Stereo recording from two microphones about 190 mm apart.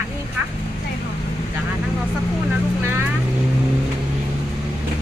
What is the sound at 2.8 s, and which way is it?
Speech, 15° right (ahead or behind).